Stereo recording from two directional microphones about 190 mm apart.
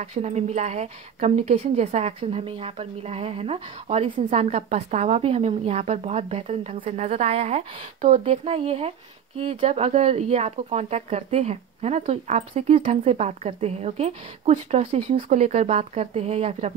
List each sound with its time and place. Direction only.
0.0 s a woman's voice: 35° right (ahead or behind)